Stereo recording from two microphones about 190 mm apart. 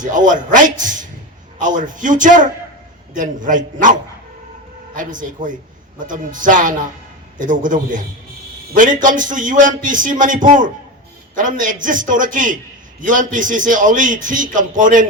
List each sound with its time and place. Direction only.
0.0 s a man's voice: 45° right (ahead or behind)